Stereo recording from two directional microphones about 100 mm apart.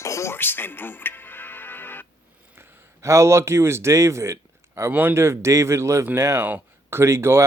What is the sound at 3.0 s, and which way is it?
Speech, 30° right (ahead or behind).